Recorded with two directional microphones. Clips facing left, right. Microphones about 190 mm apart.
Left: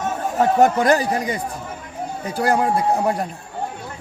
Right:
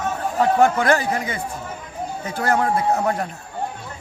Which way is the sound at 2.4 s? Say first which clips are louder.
Left 1 dB; 10° left (ahead or behind).